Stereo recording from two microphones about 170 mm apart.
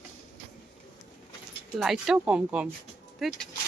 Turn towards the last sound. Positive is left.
turn(degrees=0)  # may be behind; listen again after turning